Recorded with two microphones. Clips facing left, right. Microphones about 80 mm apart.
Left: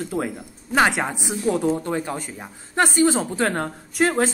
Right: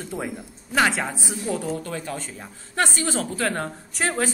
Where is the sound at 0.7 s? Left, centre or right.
Left.